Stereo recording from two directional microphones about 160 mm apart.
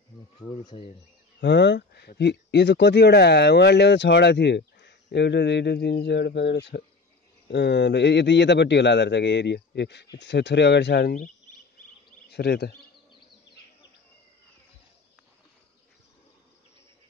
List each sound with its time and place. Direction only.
1.4 s speech: 90° left
12.3 s speech: 90° left